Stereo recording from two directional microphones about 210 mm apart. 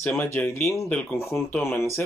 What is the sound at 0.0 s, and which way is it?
Speech, 10° left (ahead or behind).